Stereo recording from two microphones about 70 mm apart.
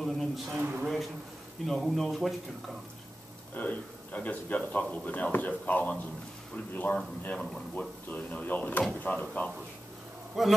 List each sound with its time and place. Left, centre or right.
0.0 s speech: centre
0.6 s speech: right
1.7 s speech: centre
3.5 s speech: left
7.3 s speech: centre
8.1 s speech: left
10.4 s speech: centre